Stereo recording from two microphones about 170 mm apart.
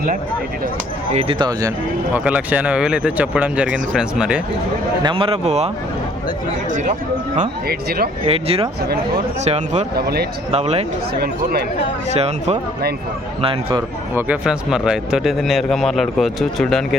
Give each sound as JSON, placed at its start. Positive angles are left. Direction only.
{"t": 1.1, "sound": "a man's voice", "side_deg": -35}
{"t": 2.1, "sound": "speech", "side_deg": -10}
{"t": 5.0, "sound": "a man's voice", "side_deg": -30}
{"t": 7.7, "sound": "speech", "side_deg": -65}
{"t": 8.3, "sound": "a man's voice", "side_deg": -35}
{"t": 9.9, "sound": "a man's voice", "side_deg": -65}
{"t": 10.5, "sound": "a man's voice", "side_deg": -40}
{"t": 12.1, "sound": "a man's voice", "side_deg": -40}
{"t": 14.2, "sound": "speech", "side_deg": -5}